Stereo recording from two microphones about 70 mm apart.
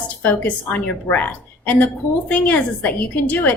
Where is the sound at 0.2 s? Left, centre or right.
Left.